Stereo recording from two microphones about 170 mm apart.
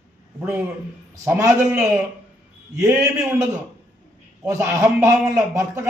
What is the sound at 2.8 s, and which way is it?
Speech, 5° right (ahead or behind).